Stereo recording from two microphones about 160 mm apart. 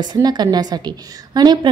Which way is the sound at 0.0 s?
25° right (ahead or behind).